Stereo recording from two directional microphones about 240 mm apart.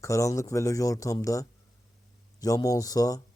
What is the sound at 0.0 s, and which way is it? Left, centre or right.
Speech, centre.